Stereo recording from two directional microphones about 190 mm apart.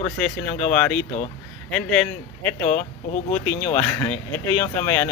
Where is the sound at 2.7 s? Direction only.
40° left (ahead or behind).